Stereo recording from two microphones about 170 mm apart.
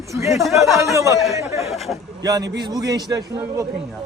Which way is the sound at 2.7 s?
25° right (ahead or behind).